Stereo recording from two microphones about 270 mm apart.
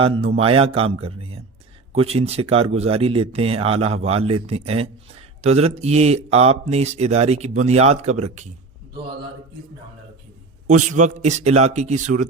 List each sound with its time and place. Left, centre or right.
0.0 s speech: right
10.7 s speech: right